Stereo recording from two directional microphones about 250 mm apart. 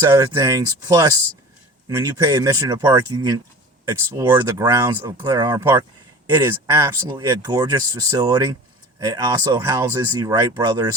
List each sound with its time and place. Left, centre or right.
0.2 s speech: centre